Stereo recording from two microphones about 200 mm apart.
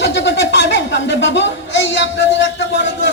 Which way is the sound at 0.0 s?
60° left (ahead or behind).